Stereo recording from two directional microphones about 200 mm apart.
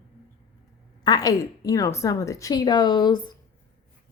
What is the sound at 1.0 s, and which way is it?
A woman's voice, 20° left (ahead or behind).